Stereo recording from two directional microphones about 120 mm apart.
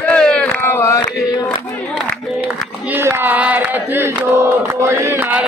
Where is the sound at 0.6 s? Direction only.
25° left (ahead or behind).